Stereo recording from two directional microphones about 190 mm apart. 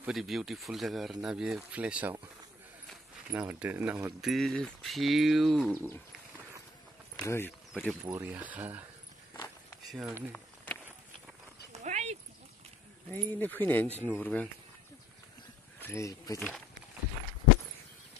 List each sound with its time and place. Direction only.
0.0 s speech: centre (ahead or behind)
3.3 s speech: 10° right (ahead or behind)
7.2 s speech: 10° left (ahead or behind)
7.9 s speech: 5° right (ahead or behind)
9.8 s speech: 5° right (ahead or behind)
10.3 s a sound: 10° left (ahead or behind)
11.7 s dog: 40° right (ahead or behind)
13.1 s speech: 10° left (ahead or behind)
15.8 s speech: 15° left (ahead or behind)
16.3 s speech: 5° left (ahead or behind)